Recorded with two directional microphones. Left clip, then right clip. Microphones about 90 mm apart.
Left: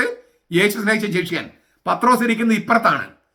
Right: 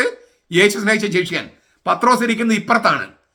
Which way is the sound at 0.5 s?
35° right (ahead or behind).